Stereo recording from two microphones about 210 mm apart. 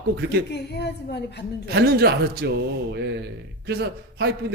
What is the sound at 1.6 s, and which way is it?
Speech, 50° right (ahead or behind).